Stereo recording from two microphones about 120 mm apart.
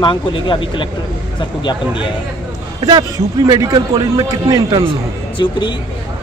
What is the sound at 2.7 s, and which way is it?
A man's voice, 35° right (ahead or behind).